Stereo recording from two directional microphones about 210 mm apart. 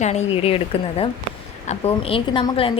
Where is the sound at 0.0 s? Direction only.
30° left (ahead or behind).